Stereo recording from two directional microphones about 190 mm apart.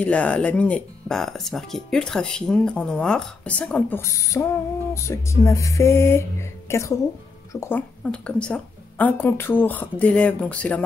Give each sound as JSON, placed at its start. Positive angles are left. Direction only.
{"t": 0.0, "sound": "speech", "side_deg": 5}